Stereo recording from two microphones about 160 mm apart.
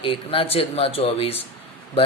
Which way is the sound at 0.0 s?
35° left (ahead or behind).